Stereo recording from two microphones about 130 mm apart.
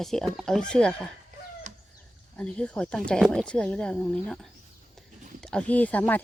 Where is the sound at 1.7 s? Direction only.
65° right (ahead or behind).